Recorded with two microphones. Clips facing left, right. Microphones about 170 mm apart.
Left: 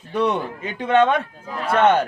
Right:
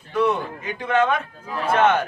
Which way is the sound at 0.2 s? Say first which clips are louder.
Even; 25° left (ahead or behind).